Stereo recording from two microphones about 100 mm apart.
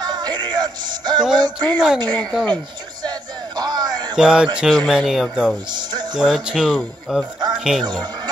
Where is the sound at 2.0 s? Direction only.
45° right (ahead or behind).